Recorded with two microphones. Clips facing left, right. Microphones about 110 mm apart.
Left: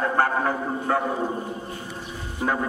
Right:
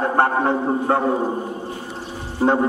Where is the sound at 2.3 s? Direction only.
30° right (ahead or behind).